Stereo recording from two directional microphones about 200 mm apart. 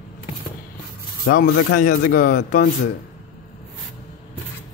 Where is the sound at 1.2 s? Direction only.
45° left (ahead or behind).